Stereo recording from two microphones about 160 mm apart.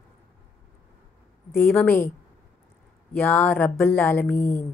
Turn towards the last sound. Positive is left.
turn(degrees=15)  # may be behind; listen again after turning